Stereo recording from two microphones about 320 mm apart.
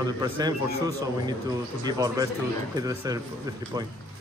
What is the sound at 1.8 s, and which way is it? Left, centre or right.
A man's voice, centre.